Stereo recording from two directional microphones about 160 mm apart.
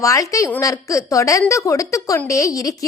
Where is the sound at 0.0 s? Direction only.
20° left (ahead or behind).